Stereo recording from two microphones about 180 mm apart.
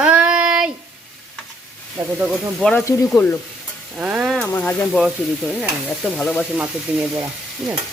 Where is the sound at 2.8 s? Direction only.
15° left (ahead or behind).